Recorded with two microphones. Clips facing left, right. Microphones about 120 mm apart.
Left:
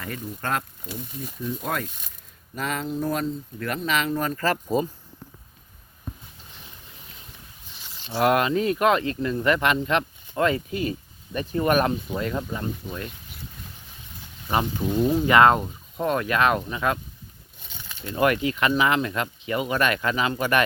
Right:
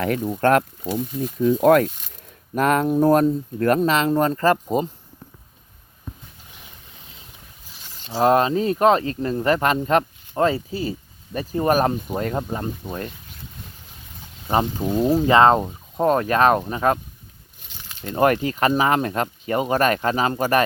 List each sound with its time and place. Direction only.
0.0 s speech: 65° right (ahead or behind)
2.6 s speech: 55° right (ahead or behind)
3.9 s speech: 35° right (ahead or behind)
8.0 s speech: 35° right (ahead or behind)
14.4 s speech: 30° right (ahead or behind)
18.0 s speech: 40° right (ahead or behind)